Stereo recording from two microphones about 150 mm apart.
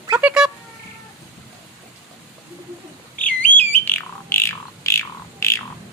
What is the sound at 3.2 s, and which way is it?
Bird, 10° left (ahead or behind).